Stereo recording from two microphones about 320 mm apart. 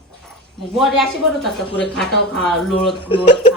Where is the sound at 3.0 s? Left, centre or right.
Centre.